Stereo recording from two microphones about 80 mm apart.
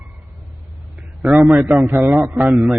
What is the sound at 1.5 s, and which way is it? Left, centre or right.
A man's voice, centre.